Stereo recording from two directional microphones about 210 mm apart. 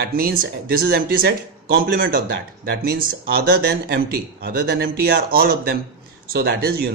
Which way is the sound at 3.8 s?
50° right (ahead or behind).